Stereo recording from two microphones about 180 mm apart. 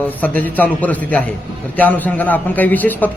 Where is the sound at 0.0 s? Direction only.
10° left (ahead or behind).